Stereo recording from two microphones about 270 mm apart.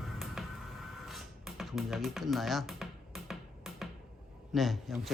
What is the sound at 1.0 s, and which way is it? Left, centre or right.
Music, centre.